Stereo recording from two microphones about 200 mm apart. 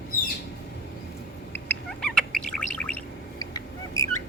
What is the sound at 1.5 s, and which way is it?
Bird, 5° left (ahead or behind).